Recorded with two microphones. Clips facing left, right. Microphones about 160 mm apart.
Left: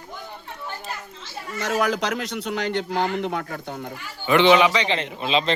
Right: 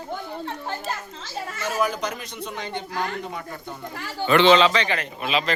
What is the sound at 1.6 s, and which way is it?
A man's voice, 90° left.